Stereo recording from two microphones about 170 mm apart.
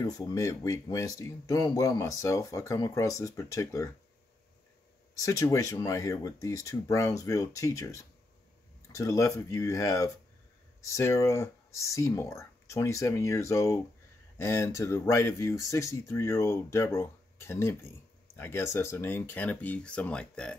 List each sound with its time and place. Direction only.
0.0 s speech: 20° left (ahead or behind)
5.1 s speech: 20° left (ahead or behind)